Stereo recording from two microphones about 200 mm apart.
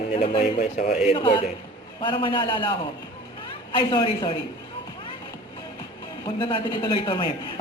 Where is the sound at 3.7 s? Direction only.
25° left (ahead or behind).